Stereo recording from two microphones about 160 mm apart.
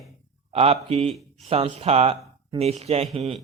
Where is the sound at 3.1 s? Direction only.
Centre (ahead or behind).